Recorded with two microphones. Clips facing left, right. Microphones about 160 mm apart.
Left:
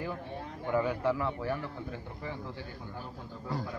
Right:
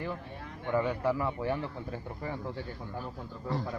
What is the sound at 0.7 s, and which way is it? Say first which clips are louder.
Speech: even; centre (ahead or behind).